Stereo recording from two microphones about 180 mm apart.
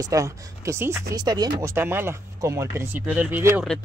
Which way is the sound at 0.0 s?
20° right (ahead or behind).